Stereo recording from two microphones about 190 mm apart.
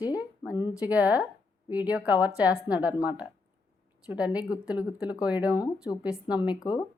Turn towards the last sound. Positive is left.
turn(degrees=-5)  # may be behind; listen again after turning